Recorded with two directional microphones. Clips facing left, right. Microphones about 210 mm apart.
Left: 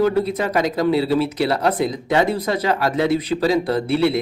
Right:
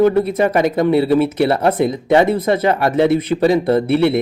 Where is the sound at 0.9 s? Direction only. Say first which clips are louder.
Right 4 dB; 55° right (ahead or behind).